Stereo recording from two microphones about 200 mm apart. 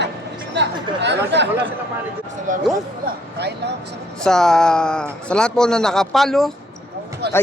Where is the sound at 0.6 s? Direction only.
60° right (ahead or behind).